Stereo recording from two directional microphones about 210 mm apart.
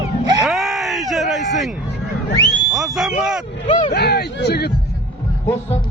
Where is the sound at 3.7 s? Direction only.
20° left (ahead or behind).